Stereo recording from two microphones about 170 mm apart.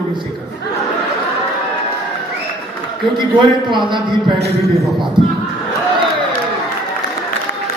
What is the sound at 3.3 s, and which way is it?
Speech, 30° right (ahead or behind).